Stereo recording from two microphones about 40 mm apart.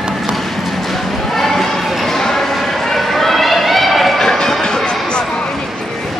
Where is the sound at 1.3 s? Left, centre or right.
Centre.